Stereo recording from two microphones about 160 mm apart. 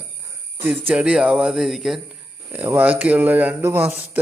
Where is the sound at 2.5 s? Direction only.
10° right (ahead or behind).